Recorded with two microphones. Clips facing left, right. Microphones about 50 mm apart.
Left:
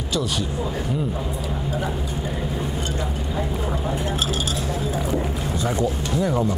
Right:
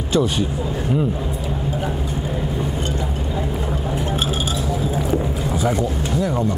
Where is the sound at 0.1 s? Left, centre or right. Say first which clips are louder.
Right 6 dB; right.